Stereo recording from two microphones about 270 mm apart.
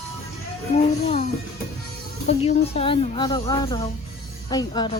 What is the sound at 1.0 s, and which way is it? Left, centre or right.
Speech, left.